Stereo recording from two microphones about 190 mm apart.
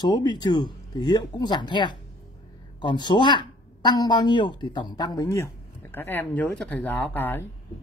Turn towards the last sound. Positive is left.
turn(degrees=10)  # may be behind; listen again after turning